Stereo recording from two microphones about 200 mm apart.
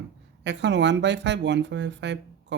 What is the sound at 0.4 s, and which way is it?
Speech, 60° right (ahead or behind).